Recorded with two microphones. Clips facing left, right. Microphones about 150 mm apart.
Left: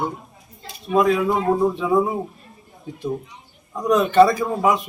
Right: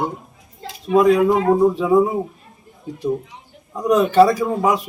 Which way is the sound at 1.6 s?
5° right (ahead or behind).